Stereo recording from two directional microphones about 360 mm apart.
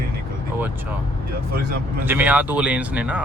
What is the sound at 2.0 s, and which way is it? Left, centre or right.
Speech, centre.